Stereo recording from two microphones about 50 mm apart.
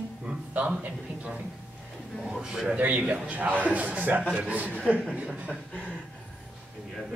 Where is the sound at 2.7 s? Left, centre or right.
Right.